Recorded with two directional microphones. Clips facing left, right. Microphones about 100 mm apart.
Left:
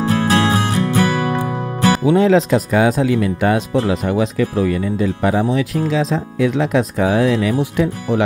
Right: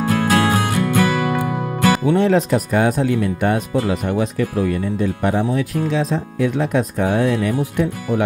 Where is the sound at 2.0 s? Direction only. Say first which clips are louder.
Left 5 dB; 90° left.